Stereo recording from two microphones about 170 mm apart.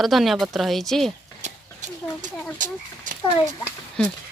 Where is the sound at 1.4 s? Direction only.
45° right (ahead or behind).